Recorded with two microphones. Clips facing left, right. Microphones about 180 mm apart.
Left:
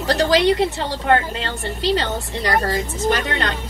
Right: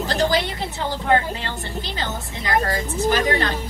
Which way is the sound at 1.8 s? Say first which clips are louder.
Left 8 dB; 75° left (ahead or behind).